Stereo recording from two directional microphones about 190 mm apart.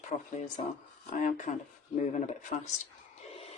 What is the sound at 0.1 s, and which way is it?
Speech, 35° left (ahead or behind).